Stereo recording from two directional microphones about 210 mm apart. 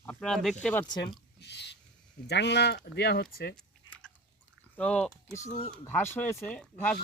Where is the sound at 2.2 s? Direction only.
55° left (ahead or behind).